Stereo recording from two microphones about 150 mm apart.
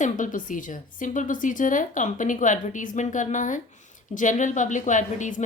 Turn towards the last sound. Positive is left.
turn(degrees=55)  # may be behind; listen again after turning